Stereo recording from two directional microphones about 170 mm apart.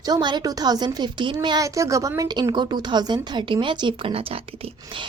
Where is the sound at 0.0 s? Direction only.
25° right (ahead or behind).